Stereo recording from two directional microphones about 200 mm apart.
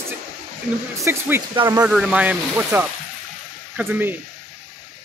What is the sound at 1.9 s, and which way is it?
Speech, 5° right (ahead or behind).